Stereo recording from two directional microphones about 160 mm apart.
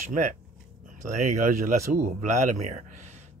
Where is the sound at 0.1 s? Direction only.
55° right (ahead or behind).